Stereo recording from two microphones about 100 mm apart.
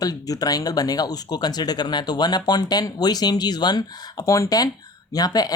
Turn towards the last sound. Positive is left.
turn(degrees=40)  # may be behind; listen again after turning